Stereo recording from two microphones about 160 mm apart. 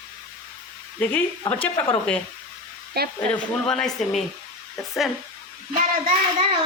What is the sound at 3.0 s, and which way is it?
Speech, 80° right.